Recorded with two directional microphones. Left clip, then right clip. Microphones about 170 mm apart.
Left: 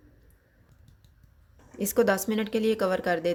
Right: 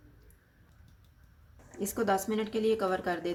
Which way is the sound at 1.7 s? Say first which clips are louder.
Left 6 dB; 50° left (ahead or behind).